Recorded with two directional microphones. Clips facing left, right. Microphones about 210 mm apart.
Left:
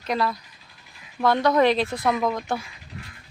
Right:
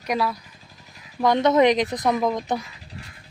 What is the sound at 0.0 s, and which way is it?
Speech, 10° right (ahead or behind).